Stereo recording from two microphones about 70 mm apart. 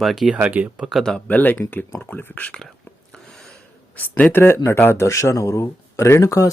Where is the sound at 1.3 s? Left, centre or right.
Left.